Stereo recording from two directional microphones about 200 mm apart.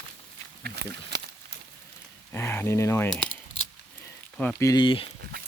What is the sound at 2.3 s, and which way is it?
Speech, 10° left (ahead or behind).